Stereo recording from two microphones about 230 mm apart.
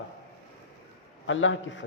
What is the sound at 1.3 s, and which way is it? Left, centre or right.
Speech, left.